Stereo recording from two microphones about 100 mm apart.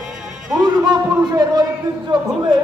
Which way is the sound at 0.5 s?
45° right (ahead or behind).